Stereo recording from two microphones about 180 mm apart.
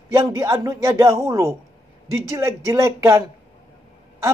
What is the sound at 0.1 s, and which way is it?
Speech, 15° right (ahead or behind).